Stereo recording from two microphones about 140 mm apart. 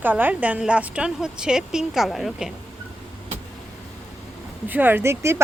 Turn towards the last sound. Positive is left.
turn(degrees=-20)  # may be behind; listen again after turning